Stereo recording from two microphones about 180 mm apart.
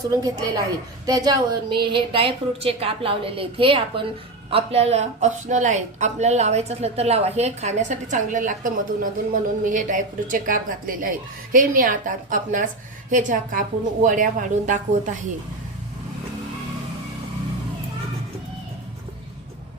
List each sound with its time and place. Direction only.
0.0 s a woman's voice: 20° right (ahead or behind); by 15.2 s 45° right (ahead or behind)